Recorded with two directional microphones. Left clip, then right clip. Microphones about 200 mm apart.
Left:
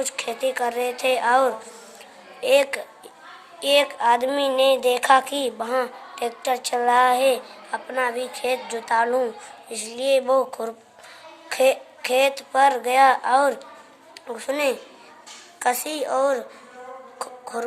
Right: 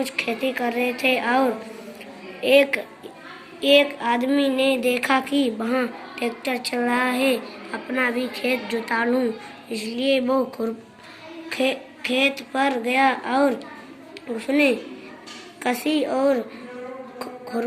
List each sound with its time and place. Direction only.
0.0 s speech: 45° left (ahead or behind)